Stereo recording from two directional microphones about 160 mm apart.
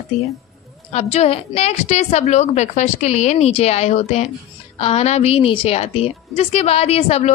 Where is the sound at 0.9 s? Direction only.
45° left (ahead or behind).